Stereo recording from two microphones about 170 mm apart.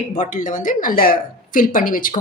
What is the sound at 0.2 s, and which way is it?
A woman's voice, 50° left (ahead or behind).